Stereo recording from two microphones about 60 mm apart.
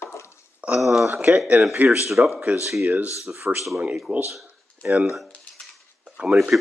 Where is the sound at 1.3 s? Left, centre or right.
Right.